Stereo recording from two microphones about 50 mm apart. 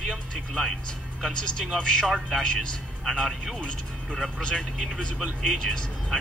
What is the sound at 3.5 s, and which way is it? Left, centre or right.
Speech, centre.